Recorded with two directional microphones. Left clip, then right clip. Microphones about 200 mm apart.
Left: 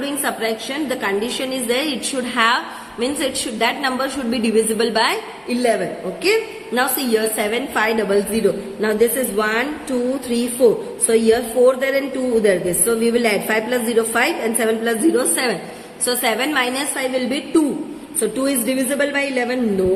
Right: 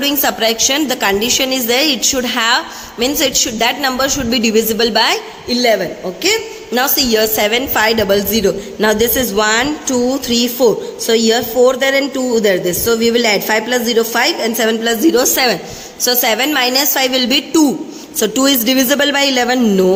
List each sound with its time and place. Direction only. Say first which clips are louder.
0.0 s a woman's voice: right 7 dB; 40° right (ahead or behind)
6.7 s a woman's voice: right 5 dB; 35° right (ahead or behind)